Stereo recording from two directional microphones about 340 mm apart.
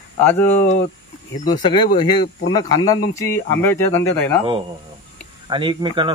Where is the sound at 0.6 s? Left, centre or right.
Left.